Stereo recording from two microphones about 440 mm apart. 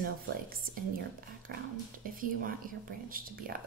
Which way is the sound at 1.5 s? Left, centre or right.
Right.